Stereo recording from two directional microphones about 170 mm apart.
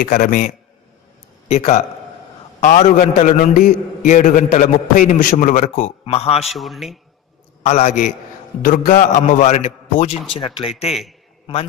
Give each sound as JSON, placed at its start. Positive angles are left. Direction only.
{"t": 0.0, "sound": "a man's voice", "side_deg": 55}
{"t": 1.5, "sound": "a man's voice", "side_deg": 40}
{"t": 6.4, "sound": "a man's voice", "side_deg": 0}
{"t": 7.6, "sound": "a man's voice", "side_deg": 40}
{"t": 8.6, "sound": "a man's voice", "side_deg": 55}